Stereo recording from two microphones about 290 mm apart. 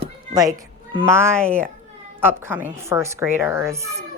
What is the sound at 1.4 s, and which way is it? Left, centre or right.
Speech, centre.